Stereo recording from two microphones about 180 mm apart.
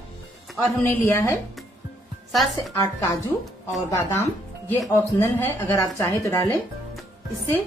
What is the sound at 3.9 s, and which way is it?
A woman's voice, 15° left (ahead or behind).